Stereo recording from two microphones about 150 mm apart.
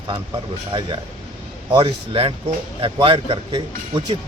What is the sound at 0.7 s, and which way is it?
Speech, 35° right (ahead or behind).